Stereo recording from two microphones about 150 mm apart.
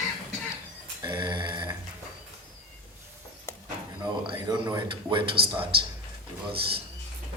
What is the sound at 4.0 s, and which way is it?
A man's voice, 30° right (ahead or behind).